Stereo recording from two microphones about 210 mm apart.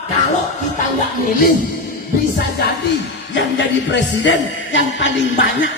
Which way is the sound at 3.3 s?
60° left (ahead or behind).